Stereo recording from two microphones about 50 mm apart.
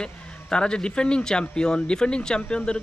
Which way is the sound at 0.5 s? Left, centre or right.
Centre.